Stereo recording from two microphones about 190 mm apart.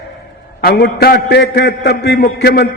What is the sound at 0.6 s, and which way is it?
A man's voice, 55° left (ahead or behind).